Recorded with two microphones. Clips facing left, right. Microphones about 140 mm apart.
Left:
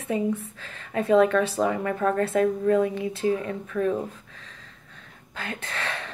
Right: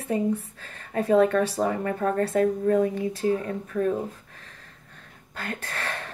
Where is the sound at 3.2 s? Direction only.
40° right (ahead or behind).